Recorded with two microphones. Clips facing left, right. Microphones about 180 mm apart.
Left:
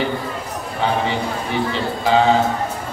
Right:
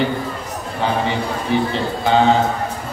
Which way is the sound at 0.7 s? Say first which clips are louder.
Even; centre (ahead or behind).